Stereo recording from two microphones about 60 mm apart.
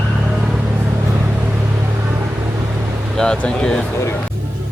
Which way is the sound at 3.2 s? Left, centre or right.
Centre.